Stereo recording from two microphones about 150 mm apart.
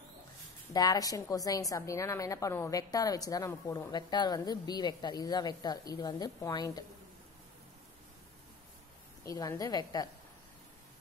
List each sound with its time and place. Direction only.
0.7 s a woman's voice: 25° left (ahead or behind)
9.2 s a woman's voice: 20° left (ahead or behind)